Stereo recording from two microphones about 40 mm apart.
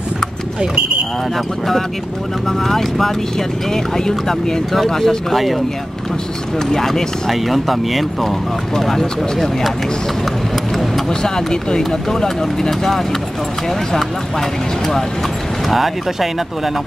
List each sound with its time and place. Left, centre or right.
2.4 s speech: centre
6.7 s speech: centre
11.1 s speech: centre
15.7 s speech: centre